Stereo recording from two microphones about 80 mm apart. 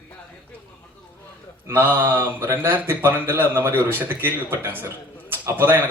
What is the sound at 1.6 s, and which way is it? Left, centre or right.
A man's voice, right.